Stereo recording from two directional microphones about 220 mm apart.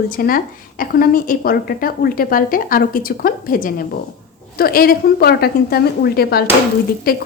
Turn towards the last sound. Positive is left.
turn(degrees=40)  # may be behind; listen again after turning